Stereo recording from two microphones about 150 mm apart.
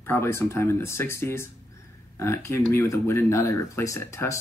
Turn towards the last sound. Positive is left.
turn(degrees=20)  # may be behind; listen again after turning